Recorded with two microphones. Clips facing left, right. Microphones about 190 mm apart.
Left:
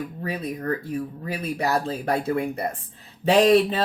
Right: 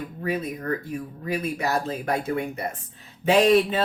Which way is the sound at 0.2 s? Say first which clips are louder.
Right 4 dB; 35° left (ahead or behind).